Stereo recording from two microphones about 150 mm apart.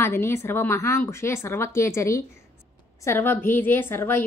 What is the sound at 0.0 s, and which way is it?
A woman's voice, 15° left (ahead or behind).